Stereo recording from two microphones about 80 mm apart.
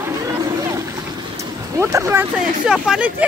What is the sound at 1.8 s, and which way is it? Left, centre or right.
Speech, right.